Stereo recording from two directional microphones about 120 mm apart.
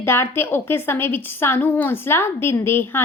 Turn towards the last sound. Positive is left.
turn(degrees=20)  # may be behind; listen again after turning